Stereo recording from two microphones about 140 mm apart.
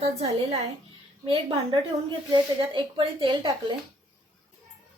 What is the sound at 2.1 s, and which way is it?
Speech, 35° right (ahead or behind).